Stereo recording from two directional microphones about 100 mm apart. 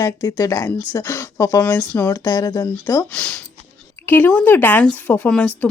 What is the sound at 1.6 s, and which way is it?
Speech, 15° left (ahead or behind).